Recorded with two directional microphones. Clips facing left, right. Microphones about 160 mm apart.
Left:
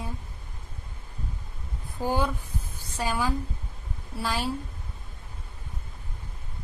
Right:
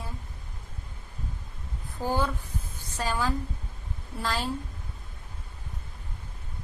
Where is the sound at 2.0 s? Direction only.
15° left (ahead or behind).